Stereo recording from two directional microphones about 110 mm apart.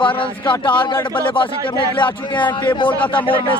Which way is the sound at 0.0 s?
50° left (ahead or behind).